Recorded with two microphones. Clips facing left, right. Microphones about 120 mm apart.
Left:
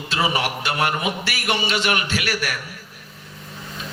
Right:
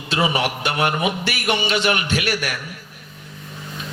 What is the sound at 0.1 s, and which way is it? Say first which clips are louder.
A man's voice: right 2 dB; 25° right (ahead or behind).